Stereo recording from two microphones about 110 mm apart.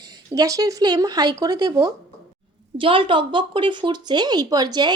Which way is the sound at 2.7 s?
50° right (ahead or behind).